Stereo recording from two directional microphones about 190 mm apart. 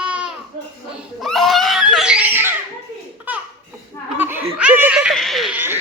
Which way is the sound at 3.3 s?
10° right (ahead or behind).